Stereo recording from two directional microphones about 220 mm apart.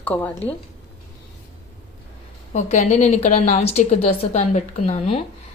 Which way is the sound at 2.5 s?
30° left (ahead or behind).